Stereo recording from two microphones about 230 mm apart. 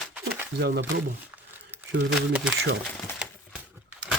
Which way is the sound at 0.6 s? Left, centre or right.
Right.